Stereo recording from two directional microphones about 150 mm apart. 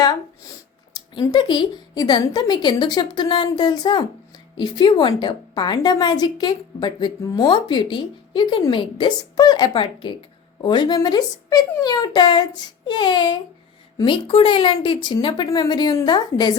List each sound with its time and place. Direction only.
1.2 s a woman's voice: 30° left (ahead or behind)